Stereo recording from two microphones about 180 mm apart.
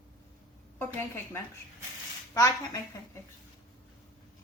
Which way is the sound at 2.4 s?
20° left (ahead or behind).